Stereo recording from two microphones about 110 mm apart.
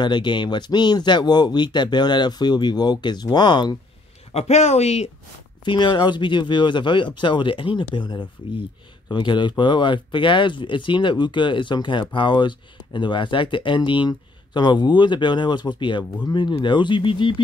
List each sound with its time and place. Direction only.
0.0 s speech: 45° left (ahead or behind)
4.3 s speech: 80° left
5.7 s speech: 45° left (ahead or behind)